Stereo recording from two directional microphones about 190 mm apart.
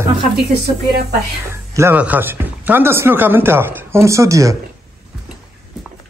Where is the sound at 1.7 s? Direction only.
10° right (ahead or behind).